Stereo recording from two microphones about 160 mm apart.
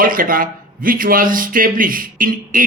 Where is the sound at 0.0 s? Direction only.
60° right (ahead or behind).